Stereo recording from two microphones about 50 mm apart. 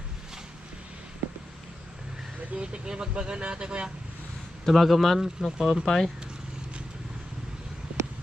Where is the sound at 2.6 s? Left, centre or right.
Centre.